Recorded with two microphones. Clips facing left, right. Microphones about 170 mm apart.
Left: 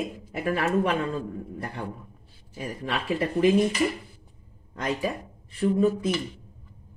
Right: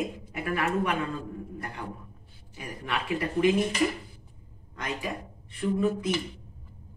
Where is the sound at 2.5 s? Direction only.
35° left (ahead or behind).